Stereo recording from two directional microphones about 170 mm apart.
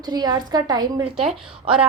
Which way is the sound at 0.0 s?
25° right (ahead or behind).